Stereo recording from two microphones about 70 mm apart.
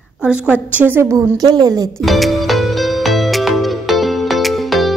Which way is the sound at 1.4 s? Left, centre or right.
Right.